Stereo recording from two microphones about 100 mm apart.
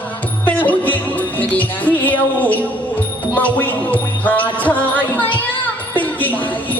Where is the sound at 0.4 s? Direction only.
15° left (ahead or behind).